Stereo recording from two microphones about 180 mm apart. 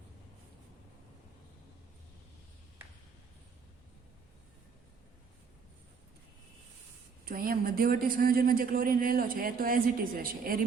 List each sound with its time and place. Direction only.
7.3 s a man's voice: 55° right (ahead or behind)